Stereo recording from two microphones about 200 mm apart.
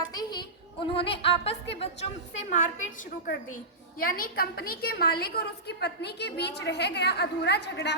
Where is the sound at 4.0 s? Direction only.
45° left (ahead or behind).